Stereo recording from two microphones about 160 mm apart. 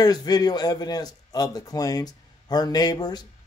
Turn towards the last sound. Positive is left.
turn(degrees=25)  # may be behind; listen again after turning